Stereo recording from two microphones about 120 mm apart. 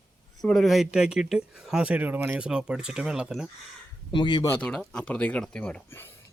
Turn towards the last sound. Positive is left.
turn(degrees=20)  # may be behind; listen again after turning